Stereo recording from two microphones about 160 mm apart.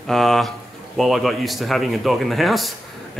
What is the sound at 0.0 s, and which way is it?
Speech, centre (ahead or behind).